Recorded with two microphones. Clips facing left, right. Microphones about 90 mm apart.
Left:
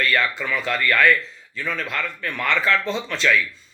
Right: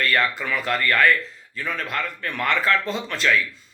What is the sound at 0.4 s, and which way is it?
Speech, 50° right (ahead or behind).